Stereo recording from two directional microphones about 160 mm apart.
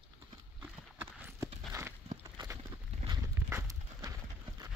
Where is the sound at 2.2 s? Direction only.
20° right (ahead or behind).